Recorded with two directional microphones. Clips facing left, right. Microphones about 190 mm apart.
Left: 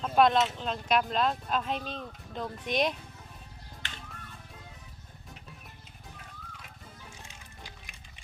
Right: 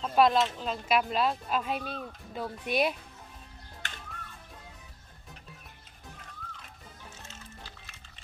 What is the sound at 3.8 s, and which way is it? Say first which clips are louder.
Music: right 1 dB; 45° right (ahead or behind).